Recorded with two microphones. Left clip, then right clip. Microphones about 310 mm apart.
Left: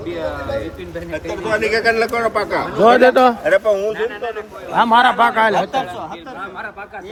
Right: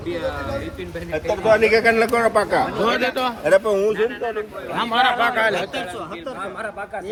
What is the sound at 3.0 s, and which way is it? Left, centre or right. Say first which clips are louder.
A man's voice: left 10 dB; left.